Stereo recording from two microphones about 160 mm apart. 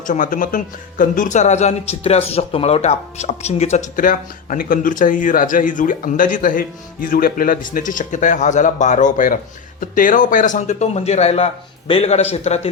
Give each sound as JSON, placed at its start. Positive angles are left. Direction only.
{"t": 0.1, "sound": "speech", "side_deg": 55}